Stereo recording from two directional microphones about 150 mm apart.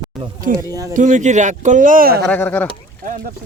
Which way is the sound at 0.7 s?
25° right (ahead or behind).